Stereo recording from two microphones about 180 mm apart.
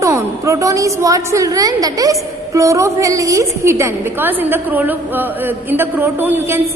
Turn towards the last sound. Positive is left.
turn(degrees=-10)  # may be behind; listen again after turning